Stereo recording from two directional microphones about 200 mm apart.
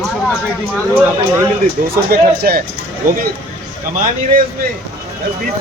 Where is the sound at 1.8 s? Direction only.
45° right (ahead or behind).